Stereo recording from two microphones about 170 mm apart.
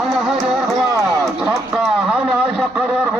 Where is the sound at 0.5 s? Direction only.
Centre (ahead or behind).